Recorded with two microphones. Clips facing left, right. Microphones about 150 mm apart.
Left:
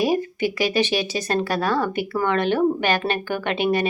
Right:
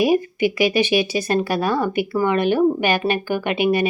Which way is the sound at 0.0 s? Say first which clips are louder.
Right 4 dB; 10° right (ahead or behind).